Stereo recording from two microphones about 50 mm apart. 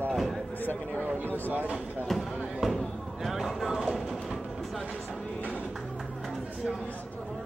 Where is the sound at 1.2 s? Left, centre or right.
Left.